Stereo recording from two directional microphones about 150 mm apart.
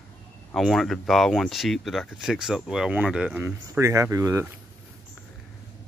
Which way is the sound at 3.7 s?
20° right (ahead or behind).